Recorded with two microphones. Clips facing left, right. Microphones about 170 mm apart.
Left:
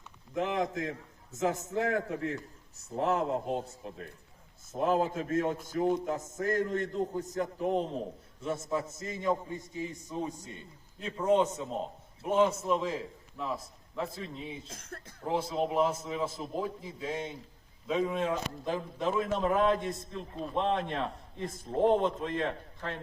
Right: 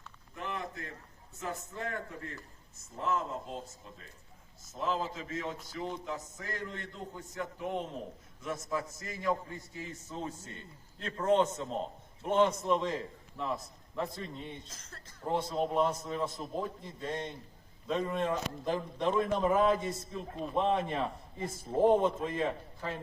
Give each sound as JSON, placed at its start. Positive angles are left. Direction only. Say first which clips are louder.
{"t": 0.3, "sound": "a man's voice", "louder": "left 9 dB", "side_deg": 90}
{"t": 14.7, "sound": "speech", "louder": "left 7 dB", "side_deg": 55}
{"t": 15.2, "sound": "a man's voice", "louder": "left 1 dB", "side_deg": 0}